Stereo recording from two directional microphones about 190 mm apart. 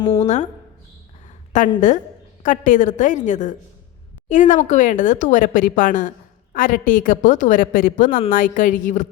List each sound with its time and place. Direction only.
0.2 s speech: 40° left (ahead or behind)
1.5 s a woman's voice: 40° left (ahead or behind)